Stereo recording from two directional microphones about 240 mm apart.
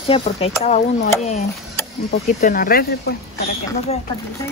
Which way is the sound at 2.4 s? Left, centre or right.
Left.